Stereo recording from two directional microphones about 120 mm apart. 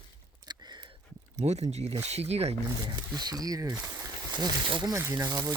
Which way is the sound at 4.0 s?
40° right (ahead or behind).